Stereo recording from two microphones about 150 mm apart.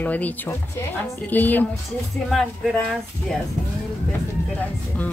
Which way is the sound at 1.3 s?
10° left (ahead or behind).